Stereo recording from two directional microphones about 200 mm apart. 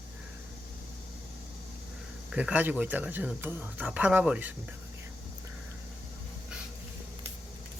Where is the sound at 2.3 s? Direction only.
10° right (ahead or behind).